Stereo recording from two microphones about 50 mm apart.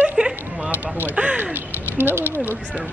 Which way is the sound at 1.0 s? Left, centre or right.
Right.